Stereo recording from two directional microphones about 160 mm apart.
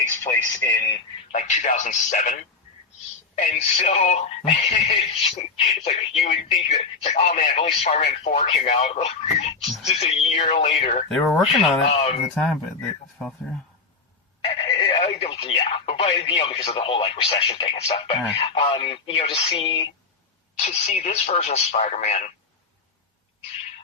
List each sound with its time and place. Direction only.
0.2 s speech: 15° left (ahead or behind)
1.3 s speech: 50° left (ahead or behind)
5.5 s speech: 40° left (ahead or behind)
11.1 s speech: centre (ahead or behind)
11.9 s speech: 45° left (ahead or behind)
12.3 s speech: centre (ahead or behind)
14.4 s speech: 35° left (ahead or behind)
20.7 s speech: 45° left (ahead or behind)